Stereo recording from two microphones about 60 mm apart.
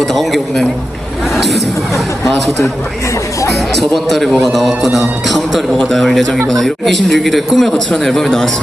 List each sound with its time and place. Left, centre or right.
0.0 s a man's voice: centre
3.8 s a man's voice: centre